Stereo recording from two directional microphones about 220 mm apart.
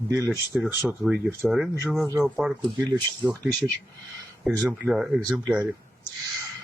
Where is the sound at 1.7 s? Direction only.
10° right (ahead or behind).